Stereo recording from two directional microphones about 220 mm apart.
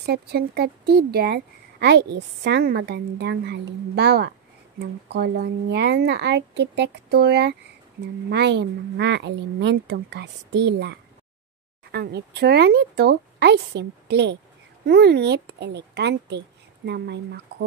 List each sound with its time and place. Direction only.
0.0 s speech: 45° right (ahead or behind)